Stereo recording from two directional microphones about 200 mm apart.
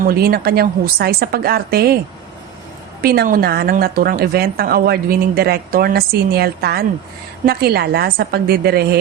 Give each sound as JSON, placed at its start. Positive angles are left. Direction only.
{"t": 0.0, "sound": "a woman's voice", "side_deg": -50}
{"t": 3.0, "sound": "a woman's voice", "side_deg": -50}